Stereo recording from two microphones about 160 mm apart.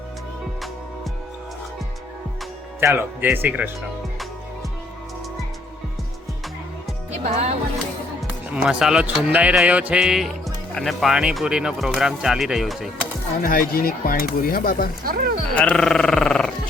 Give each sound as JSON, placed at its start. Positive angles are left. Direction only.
{"t": 2.8, "sound": "speech", "side_deg": -15}
{"t": 7.1, "sound": "speech", "side_deg": -45}
{"t": 8.5, "sound": "speech", "side_deg": -5}
{"t": 13.4, "sound": "speech", "side_deg": 65}
{"t": 15.0, "sound": "speech", "side_deg": -75}
{"t": 15.5, "sound": "speech", "side_deg": 5}